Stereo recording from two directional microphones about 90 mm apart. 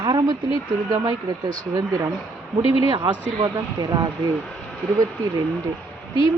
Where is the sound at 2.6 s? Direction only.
90° left.